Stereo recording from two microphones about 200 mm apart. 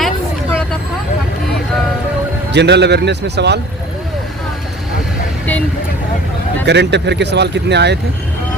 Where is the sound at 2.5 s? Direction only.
60° right (ahead or behind).